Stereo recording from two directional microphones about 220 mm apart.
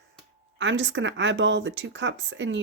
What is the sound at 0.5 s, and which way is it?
Speech, 55° right (ahead or behind).